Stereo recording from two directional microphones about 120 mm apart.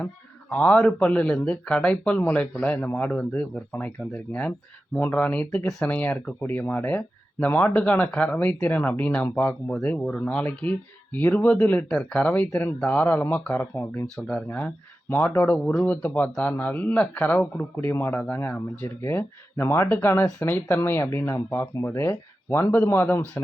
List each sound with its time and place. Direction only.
0.5 s speech: 10° left (ahead or behind)
14.2 s speech: 5° left (ahead or behind)